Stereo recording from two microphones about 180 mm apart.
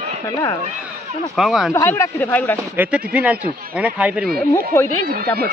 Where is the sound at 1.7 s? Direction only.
15° left (ahead or behind).